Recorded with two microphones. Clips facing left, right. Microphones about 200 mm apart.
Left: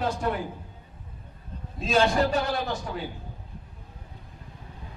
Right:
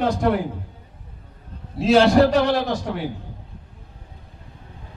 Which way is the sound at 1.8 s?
75° right (ahead or behind).